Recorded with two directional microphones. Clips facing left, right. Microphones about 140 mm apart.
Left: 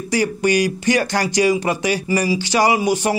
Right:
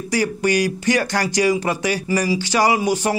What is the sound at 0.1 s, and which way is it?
Speech, 20° left (ahead or behind).